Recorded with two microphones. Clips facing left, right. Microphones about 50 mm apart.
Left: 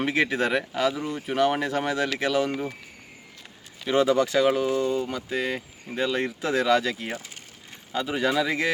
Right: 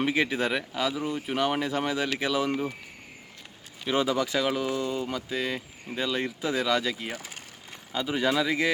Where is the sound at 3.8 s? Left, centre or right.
Centre.